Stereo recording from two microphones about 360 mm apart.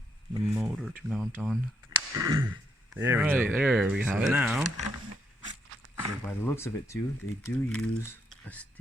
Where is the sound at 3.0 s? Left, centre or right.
Centre.